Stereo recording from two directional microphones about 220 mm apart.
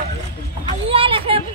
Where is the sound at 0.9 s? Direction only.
25° right (ahead or behind).